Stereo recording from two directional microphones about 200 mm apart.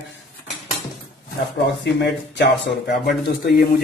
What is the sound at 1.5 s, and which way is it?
Speech, 60° left (ahead or behind).